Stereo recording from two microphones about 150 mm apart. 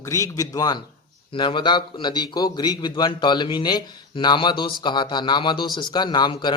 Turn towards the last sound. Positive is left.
turn(degrees=30)  # may be behind; listen again after turning